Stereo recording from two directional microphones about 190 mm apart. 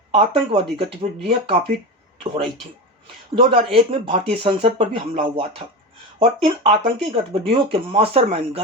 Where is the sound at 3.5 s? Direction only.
30° right (ahead or behind).